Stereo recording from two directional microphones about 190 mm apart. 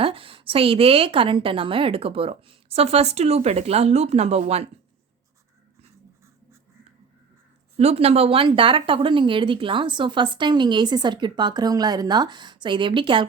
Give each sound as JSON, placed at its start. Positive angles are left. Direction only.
{"t": 0.0, "sound": "speech", "side_deg": -30}
{"t": 7.8, "sound": "speech", "side_deg": -35}